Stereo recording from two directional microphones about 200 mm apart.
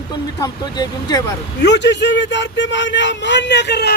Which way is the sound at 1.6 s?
60° left (ahead or behind).